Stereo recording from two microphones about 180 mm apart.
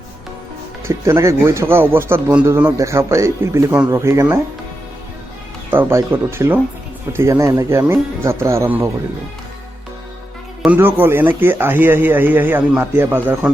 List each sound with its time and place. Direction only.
0.9 s speech: 15° right (ahead or behind)
5.7 s speech: 15° right (ahead or behind)
10.6 s speech: 10° right (ahead or behind)